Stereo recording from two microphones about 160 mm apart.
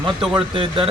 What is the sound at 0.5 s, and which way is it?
Speech, 35° right (ahead or behind).